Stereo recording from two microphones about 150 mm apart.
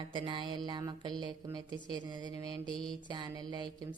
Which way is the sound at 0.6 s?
30° right (ahead or behind).